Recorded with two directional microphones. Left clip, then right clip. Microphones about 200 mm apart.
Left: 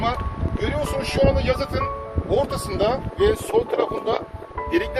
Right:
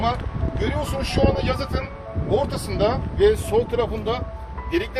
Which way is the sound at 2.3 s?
50° left (ahead or behind).